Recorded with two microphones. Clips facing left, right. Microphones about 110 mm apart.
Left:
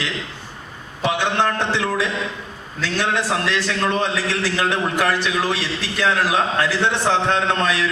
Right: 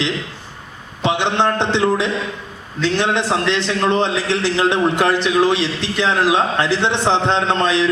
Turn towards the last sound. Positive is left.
turn(degrees=-20)  # may be behind; listen again after turning